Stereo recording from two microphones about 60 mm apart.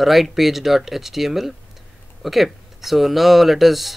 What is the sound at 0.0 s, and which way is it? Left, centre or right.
Speech, centre.